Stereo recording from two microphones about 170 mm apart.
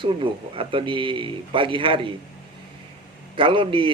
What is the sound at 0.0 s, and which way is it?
A man's voice, 30° right (ahead or behind).